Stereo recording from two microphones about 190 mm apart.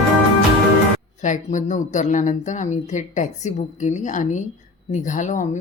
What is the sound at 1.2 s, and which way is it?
Speech, 40° left (ahead or behind).